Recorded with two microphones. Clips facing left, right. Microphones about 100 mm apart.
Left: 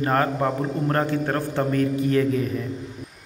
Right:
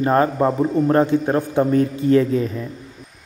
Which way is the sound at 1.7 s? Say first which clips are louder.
Right 4 dB; 25° right (ahead or behind).